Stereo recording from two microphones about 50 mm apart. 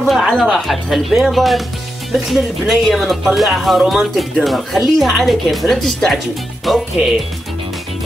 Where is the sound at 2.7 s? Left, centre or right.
Centre.